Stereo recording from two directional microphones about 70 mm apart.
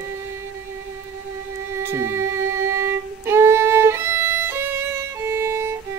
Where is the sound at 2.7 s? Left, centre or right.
Right.